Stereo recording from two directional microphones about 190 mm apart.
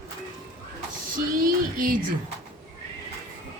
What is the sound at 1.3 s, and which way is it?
Speech, 45° right (ahead or behind).